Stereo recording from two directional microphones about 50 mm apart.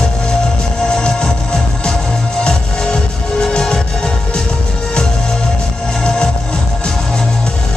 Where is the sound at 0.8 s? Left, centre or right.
Centre.